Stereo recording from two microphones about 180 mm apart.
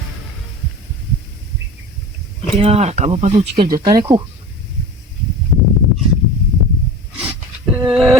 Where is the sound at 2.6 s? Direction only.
35° right (ahead or behind).